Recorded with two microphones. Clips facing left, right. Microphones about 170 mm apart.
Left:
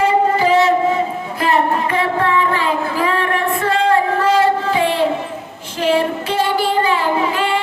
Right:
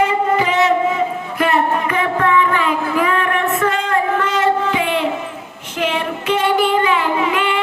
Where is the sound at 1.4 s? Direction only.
30° left (ahead or behind).